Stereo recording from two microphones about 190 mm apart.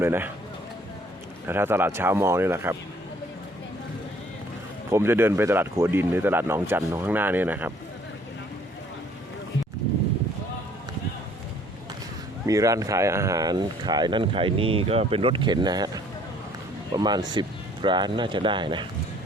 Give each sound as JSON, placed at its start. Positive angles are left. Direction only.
{"t": 0.0, "sound": "speech", "side_deg": -10}
{"t": 1.5, "sound": "speech", "side_deg": -10}
{"t": 4.9, "sound": "speech", "side_deg": -15}
{"t": 12.5, "sound": "speech", "side_deg": -15}
{"t": 16.9, "sound": "speech", "side_deg": -20}